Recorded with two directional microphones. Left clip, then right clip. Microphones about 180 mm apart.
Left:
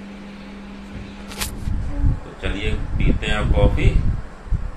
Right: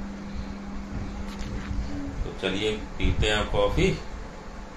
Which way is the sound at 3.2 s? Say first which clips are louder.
Left 1 dB; 15° right (ahead or behind).